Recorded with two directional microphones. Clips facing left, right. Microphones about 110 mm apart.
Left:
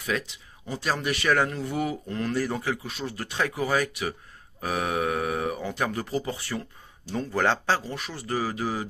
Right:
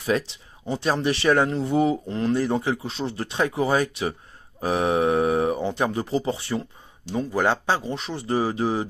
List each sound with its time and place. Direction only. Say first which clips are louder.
0.0 s speech: right 6 dB; 30° right (ahead or behind)